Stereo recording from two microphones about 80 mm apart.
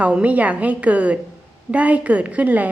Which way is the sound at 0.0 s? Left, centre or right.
Centre.